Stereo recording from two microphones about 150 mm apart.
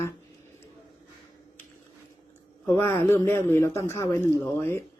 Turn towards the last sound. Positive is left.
turn(degrees=15)  # may be behind; listen again after turning